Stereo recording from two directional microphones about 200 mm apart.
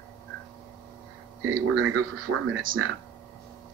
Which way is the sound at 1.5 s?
90° right.